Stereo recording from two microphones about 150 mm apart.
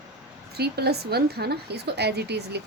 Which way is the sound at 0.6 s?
90° right.